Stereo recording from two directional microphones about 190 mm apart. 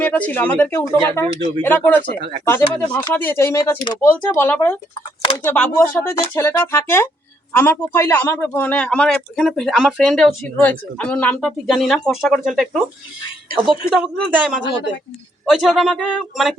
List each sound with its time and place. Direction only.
0.0 s a man's voice: 10° left (ahead or behind)